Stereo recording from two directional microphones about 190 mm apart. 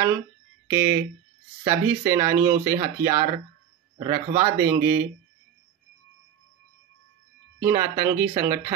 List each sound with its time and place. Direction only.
0.7 s speech: 15° right (ahead or behind)
7.6 s speech: 15° right (ahead or behind)